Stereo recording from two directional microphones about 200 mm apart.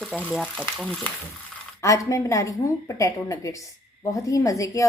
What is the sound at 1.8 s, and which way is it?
A woman's voice, 15° left (ahead or behind).